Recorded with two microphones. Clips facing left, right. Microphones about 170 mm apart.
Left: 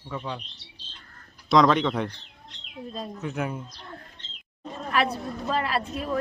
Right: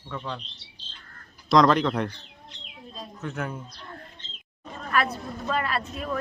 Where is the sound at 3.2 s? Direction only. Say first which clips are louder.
Left 1 dB; 10° left (ahead or behind).